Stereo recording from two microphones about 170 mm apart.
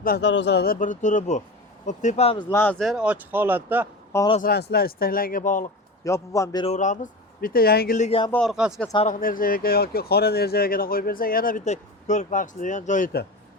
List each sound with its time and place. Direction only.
0.0 s speech: 75° left (ahead or behind); by 2.4 s 35° left (ahead or behind)
2.5 s speech: 10° left (ahead or behind); by 3.8 s 10° right (ahead or behind)
4.4 s speech: 65° left (ahead or behind); by 5.7 s 50° left (ahead or behind)
6.1 s a man's voice: 15° left (ahead or behind)
6.7 s speech: 45° left (ahead or behind)
8.3 s speech: centre (ahead or behind)
9.0 s speech: 55° left (ahead or behind)